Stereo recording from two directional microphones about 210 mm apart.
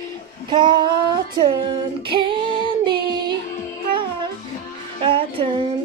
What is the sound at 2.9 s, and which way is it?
Child singing, 20° right (ahead or behind).